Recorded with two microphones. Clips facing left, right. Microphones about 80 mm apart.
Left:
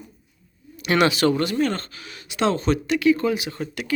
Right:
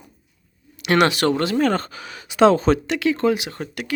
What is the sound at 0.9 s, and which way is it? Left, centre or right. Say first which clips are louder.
Speech: right 1 dB; right.